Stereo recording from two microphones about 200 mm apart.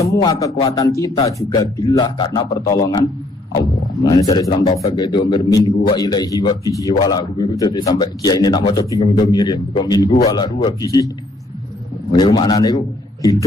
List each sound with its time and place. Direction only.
0.0 s a man's voice: 15° left (ahead or behind)
12.1 s a man's voice: 20° left (ahead or behind)